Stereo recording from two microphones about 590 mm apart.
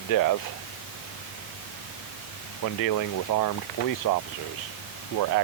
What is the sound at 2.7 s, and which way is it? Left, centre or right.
Speech, left.